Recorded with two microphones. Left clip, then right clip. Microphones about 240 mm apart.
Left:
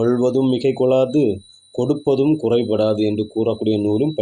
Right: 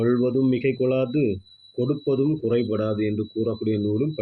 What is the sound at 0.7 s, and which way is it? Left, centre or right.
Speech, centre.